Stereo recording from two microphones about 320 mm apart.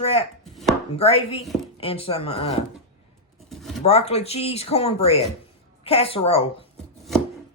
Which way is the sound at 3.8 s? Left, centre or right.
Centre.